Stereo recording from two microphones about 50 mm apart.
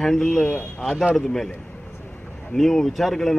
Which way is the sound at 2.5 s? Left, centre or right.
Centre.